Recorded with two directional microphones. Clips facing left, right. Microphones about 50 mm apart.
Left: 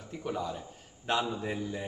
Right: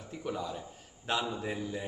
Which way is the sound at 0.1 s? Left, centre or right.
Centre.